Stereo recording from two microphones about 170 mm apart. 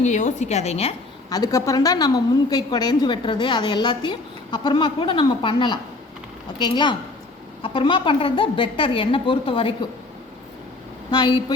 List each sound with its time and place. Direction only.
0.0 s a woman's voice: 45° left (ahead or behind)
1.3 s a woman's voice: 20° left (ahead or behind)
11.1 s a woman's voice: 25° left (ahead or behind)